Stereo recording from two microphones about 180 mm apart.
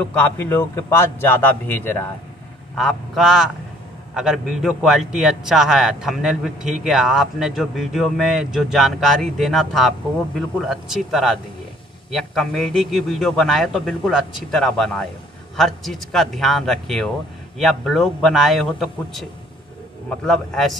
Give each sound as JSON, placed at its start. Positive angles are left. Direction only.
{"t": 0.0, "sound": "a man's voice", "side_deg": 10}
{"t": 20.2, "sound": "a man's voice", "side_deg": 0}